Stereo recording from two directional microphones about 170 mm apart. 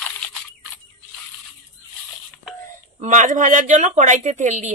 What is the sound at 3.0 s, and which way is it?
Speech, 45° right (ahead or behind).